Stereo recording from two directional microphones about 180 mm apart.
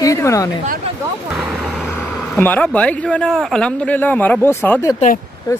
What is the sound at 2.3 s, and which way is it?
Speech, 10° left (ahead or behind).